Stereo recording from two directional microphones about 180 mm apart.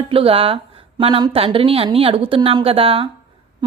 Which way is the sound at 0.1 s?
30° right (ahead or behind).